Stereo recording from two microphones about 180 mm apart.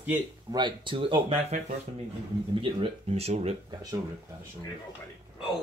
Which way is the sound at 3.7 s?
20° right (ahead or behind).